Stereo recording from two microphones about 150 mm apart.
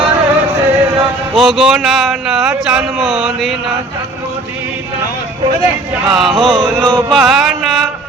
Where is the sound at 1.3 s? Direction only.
Centre (ahead or behind).